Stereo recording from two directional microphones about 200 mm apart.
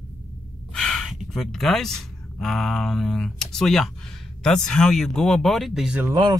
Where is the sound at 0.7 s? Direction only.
Centre (ahead or behind).